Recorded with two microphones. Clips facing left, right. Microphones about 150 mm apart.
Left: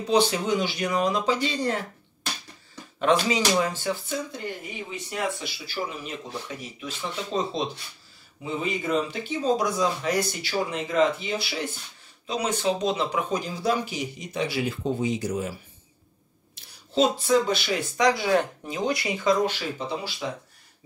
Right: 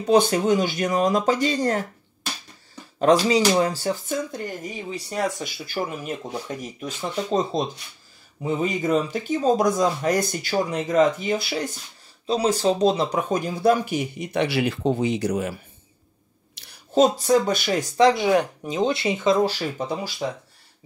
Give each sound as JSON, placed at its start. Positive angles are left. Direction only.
{"t": 0.1, "sound": "speech", "side_deg": -50}
{"t": 3.0, "sound": "speech", "side_deg": -35}
{"t": 16.6, "sound": "a sound", "side_deg": -80}
{"t": 16.9, "sound": "speech", "side_deg": -45}
{"t": 17.9, "sound": "speech", "side_deg": -25}
{"t": 19.8, "sound": "speech", "side_deg": -45}